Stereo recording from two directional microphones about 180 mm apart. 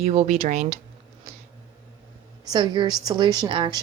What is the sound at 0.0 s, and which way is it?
Speech, 35° right (ahead or behind).